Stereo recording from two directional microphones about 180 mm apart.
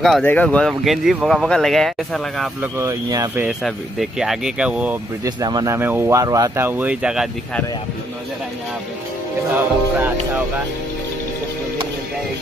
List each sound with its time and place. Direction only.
0.0 s speech: 5° left (ahead or behind)
2.6 s speech: 15° right (ahead or behind)
3.4 s speech: centre (ahead or behind)
5.2 s speech: 20° right (ahead or behind); by 7.2 s 5° right (ahead or behind)
9.6 s speech: 10° right (ahead or behind)